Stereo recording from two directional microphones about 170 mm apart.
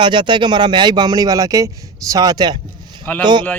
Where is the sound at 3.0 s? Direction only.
10° left (ahead or behind).